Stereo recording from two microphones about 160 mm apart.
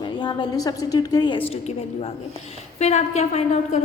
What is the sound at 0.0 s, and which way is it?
A woman's voice, 30° left (ahead or behind).